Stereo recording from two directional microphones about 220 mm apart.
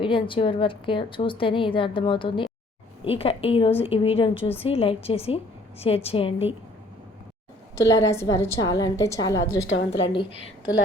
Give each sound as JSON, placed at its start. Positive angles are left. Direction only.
{"t": 0.0, "sound": "a woman's voice", "side_deg": 25}
{"t": 8.0, "sound": "a woman's voice", "side_deg": 15}
{"t": 9.6, "sound": "a woman's voice", "side_deg": 60}